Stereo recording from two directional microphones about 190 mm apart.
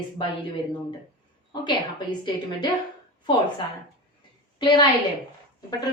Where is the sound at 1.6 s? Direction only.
25° left (ahead or behind).